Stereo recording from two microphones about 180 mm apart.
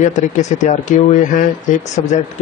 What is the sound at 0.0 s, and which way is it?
Speech, 40° left (ahead or behind).